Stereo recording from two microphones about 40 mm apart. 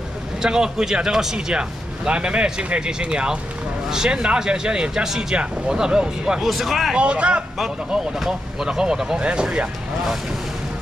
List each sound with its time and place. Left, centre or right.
0.4 s speech: centre
1.5 s speech: right
6.4 s speech: centre
7.0 s speech: right
8.3 s speech: centre